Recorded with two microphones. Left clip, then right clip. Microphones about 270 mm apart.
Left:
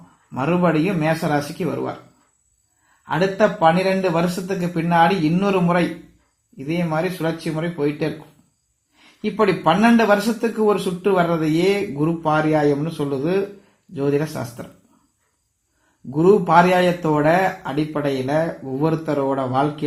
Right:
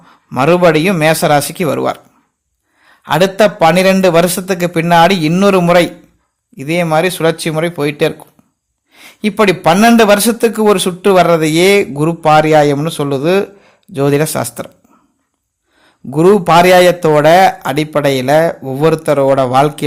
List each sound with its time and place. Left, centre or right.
0.3 s a man's voice: right
3.0 s a man's voice: right
9.2 s a man's voice: right
10.6 s a man's voice: right
16.0 s a man's voice: right